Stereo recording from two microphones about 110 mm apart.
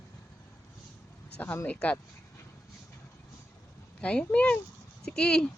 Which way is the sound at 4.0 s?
10° left (ahead or behind).